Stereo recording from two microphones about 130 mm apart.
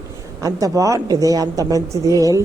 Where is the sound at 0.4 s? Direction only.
25° right (ahead or behind).